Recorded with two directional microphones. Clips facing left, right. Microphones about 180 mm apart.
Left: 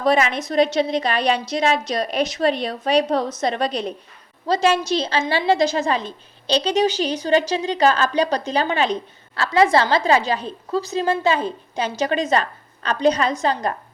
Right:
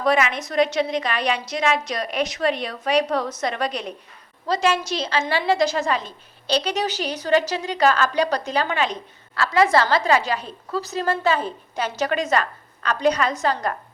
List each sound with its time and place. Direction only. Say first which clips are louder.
0.0 s a woman's voice: left 2 dB; 30° left (ahead or behind)